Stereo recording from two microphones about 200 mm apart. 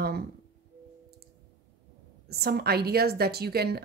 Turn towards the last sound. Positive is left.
turn(degrees=-50)  # may be behind; listen again after turning